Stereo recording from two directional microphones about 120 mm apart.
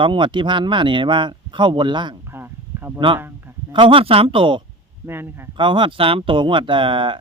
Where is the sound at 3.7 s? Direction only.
45° right (ahead or behind).